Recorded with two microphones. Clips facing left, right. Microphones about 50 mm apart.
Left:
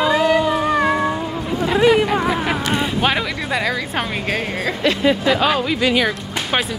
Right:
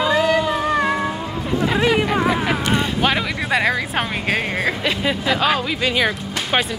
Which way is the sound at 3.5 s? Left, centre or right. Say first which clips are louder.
Right 4 dB; right.